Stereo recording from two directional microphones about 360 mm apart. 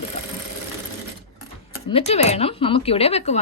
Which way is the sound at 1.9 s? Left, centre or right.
Centre.